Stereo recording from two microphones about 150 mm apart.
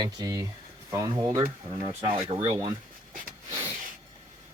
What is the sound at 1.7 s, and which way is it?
Speech, 35° right (ahead or behind).